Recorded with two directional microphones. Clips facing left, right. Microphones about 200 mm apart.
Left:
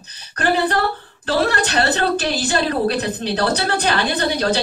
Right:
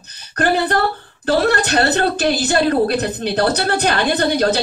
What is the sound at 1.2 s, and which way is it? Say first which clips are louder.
A woman's voice: right 3 dB; 45° right (ahead or behind).